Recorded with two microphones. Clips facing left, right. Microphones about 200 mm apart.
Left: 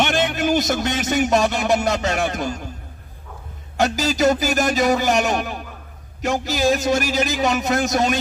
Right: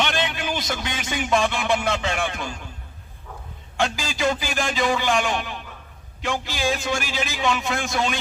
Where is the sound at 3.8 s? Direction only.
40° left (ahead or behind).